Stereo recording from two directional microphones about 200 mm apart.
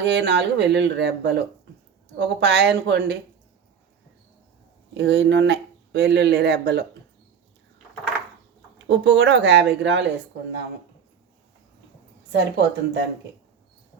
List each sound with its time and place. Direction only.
0.0 s speech: 60° right (ahead or behind)
4.9 s speech: 65° right (ahead or behind)
8.9 s speech: 60° right (ahead or behind)
12.3 s speech: 60° right (ahead or behind)